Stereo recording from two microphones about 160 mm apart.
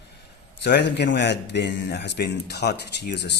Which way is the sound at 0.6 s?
90° left.